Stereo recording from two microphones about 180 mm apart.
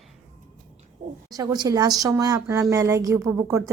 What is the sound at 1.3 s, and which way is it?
Speech, 20° right (ahead or behind).